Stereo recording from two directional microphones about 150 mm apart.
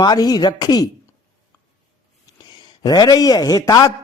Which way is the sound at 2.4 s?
30° left (ahead or behind).